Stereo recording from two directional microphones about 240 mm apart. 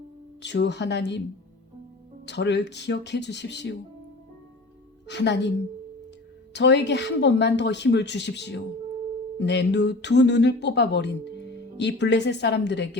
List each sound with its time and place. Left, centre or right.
0.4 s speech: left
2.2 s speech: left
5.0 s speech: left
6.5 s speech: left